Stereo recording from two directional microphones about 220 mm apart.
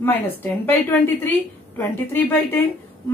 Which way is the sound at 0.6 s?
10° left (ahead or behind).